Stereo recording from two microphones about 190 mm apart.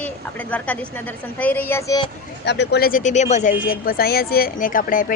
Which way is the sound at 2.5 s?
60° left (ahead or behind).